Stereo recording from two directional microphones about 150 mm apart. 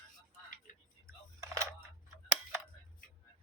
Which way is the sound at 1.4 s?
20° right (ahead or behind).